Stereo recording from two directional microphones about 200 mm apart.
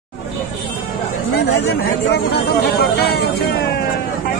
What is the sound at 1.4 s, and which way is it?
Speech, 60° left (ahead or behind).